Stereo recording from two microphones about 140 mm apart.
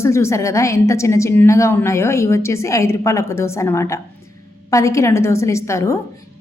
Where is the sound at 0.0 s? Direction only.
20° left (ahead or behind).